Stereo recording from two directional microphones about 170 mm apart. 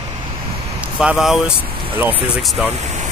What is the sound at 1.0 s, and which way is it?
Speech, 5° right (ahead or behind).